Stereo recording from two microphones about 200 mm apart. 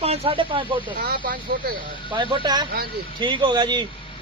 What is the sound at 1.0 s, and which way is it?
Speech, 45° right (ahead or behind).